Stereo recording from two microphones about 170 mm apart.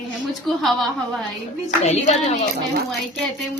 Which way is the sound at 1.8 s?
40° left (ahead or behind).